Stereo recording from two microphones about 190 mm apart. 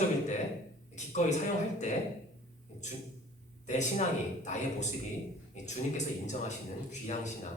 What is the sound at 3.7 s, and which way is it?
A man's voice, 40° left (ahead or behind).